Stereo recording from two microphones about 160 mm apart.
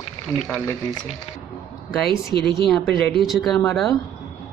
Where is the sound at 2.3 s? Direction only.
90° left.